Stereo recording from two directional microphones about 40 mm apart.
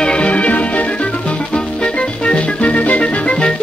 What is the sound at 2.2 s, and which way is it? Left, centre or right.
Music, left.